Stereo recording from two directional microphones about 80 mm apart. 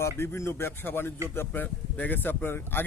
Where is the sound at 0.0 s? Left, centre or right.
Left.